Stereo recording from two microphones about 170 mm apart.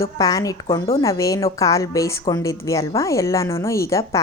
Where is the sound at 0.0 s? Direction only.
20° left (ahead or behind).